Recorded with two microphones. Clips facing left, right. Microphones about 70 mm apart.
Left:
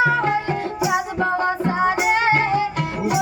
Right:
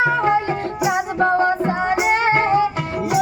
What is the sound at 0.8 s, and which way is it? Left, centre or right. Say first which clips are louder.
Music: right 3 dB; right.